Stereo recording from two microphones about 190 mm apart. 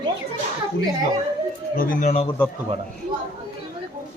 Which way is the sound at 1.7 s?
50° left (ahead or behind).